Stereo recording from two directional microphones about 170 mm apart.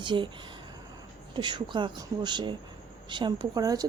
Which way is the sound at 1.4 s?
25° right (ahead or behind).